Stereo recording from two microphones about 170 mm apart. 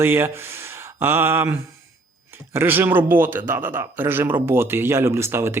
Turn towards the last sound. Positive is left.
turn(degrees=-15)  # may be behind; listen again after turning